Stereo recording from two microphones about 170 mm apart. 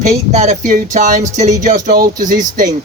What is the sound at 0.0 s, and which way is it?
Speech, 40° right (ahead or behind).